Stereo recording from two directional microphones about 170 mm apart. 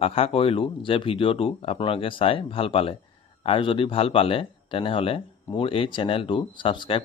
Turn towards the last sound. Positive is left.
turn(degrees=30)  # may be behind; listen again after turning